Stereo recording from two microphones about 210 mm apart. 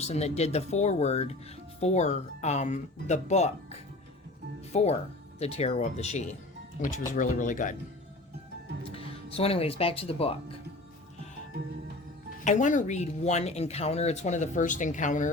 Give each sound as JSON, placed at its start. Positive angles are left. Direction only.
{"t": 0.0, "sound": "speech", "side_deg": 30}
{"t": 8.8, "sound": "speech", "side_deg": 25}
{"t": 12.5, "sound": "speech", "side_deg": 35}